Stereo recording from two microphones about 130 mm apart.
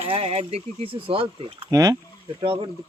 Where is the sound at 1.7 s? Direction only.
25° right (ahead or behind).